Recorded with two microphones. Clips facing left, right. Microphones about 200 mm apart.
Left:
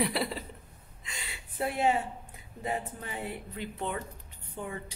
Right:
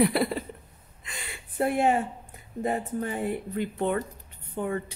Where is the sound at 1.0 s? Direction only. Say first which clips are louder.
Right 3 dB; 50° right (ahead or behind).